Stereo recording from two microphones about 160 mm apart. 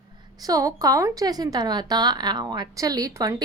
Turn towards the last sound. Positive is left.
turn(degrees=-20)  # may be behind; listen again after turning